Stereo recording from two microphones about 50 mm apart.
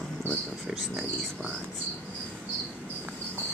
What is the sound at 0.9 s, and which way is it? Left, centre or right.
Speech, right.